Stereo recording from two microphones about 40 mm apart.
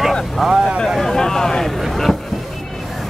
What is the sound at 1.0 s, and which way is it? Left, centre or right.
Speech, centre.